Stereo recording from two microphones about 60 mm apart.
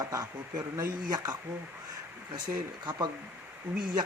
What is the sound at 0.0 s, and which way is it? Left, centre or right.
Speech, right.